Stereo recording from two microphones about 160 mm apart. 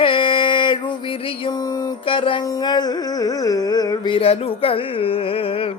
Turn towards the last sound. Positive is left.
turn(degrees=35)  # may be behind; listen again after turning